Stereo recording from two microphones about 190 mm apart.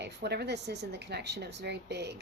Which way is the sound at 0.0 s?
60° right (ahead or behind).